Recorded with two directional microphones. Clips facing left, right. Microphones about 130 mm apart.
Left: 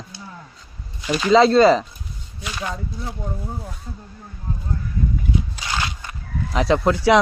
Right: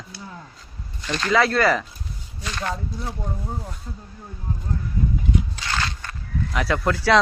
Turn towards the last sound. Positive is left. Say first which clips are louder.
# left 4 dB
turn(degrees=20)  # may be behind; listen again after turning